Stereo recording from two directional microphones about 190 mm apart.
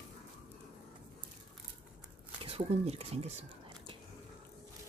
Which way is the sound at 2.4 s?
30° right (ahead or behind).